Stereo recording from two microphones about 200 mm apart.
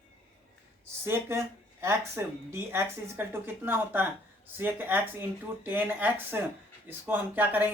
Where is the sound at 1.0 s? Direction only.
15° right (ahead or behind).